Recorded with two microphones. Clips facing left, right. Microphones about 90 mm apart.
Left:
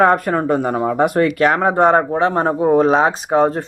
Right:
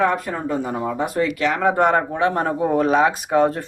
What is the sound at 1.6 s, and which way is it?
Speech, 30° left (ahead or behind).